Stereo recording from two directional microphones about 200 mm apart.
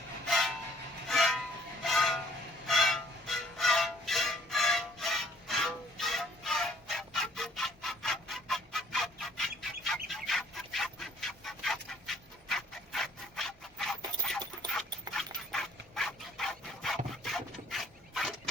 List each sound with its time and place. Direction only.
0.3 s train: centre (ahead or behind)
1.8 s vehicle: centre (ahead or behind)
2.6 s music: centre (ahead or behind)
14.6 s dog: 20° right (ahead or behind)
15.5 s rub: centre (ahead or behind)